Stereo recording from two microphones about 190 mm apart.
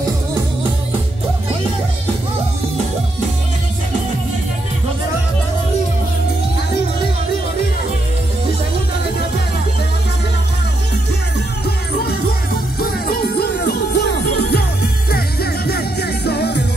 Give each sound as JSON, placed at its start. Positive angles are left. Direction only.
{"t": 11.6, "sound": "music", "side_deg": 55}